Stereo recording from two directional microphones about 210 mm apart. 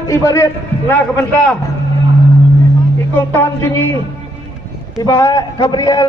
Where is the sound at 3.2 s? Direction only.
10° left (ahead or behind).